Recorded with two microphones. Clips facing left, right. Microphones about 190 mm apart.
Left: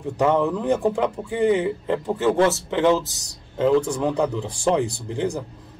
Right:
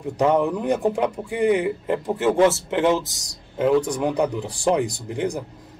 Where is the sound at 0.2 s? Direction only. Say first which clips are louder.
Even; 15° right (ahead or behind).